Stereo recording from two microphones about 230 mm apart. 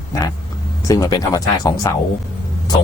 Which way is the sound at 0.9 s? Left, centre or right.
Centre.